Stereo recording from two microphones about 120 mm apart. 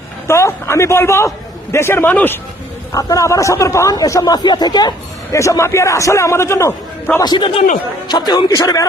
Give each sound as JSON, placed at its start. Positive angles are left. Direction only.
{"t": 0.3, "sound": "a man's voice", "side_deg": 20}
{"t": 2.9, "sound": "a man's voice", "side_deg": 30}
{"t": 7.2, "sound": "a man's voice", "side_deg": 40}